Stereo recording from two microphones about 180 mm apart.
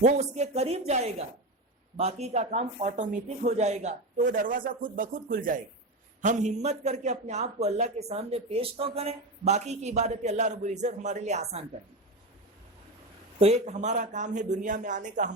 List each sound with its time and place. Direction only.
0.0 s a man's voice: 40° right (ahead or behind)
13.4 s speech: 40° right (ahead or behind)